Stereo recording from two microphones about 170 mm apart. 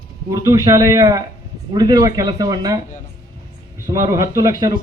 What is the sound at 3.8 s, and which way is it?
Speech, 20° right (ahead or behind).